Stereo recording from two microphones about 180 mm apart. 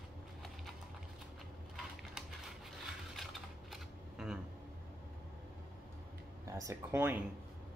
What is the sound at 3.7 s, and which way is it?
Camera, 5° right (ahead or behind).